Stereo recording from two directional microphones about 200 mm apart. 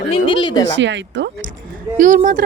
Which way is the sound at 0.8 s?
65° right (ahead or behind).